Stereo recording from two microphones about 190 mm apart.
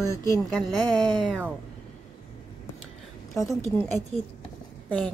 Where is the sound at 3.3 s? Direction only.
15° left (ahead or behind).